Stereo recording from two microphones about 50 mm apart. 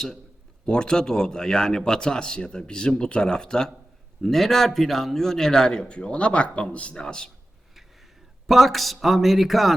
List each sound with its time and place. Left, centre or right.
0.6 s a man's voice: centre
8.4 s speech: centre